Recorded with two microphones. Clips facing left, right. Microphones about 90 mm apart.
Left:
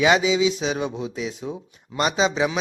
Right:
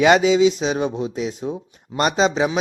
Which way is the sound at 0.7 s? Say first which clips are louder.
Right 4 dB; 45° right (ahead or behind).